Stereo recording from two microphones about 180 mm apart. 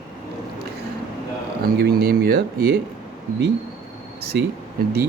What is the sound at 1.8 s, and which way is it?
Speech, 60° right (ahead or behind).